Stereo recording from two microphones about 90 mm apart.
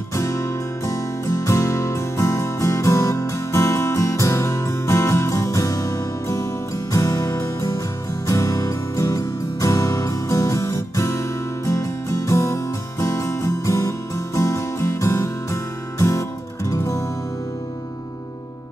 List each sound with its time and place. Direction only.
0.1 s music: 35° left (ahead or behind)